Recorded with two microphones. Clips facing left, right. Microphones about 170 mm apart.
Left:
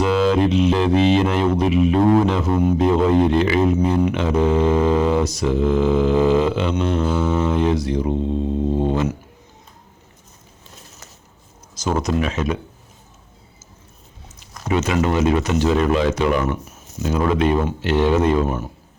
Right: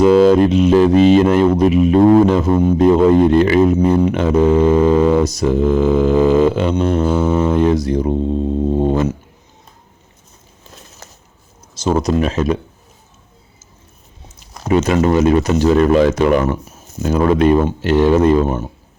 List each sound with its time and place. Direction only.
0.0 s mantra: 45° right (ahead or behind)
11.7 s speech: 30° right (ahead or behind)
14.7 s mantra: 40° right (ahead or behind)
18.4 s speech: 25° right (ahead or behind)